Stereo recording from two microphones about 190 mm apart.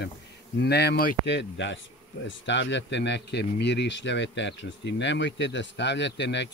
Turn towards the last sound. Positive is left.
turn(degrees=65)  # may be behind; listen again after turning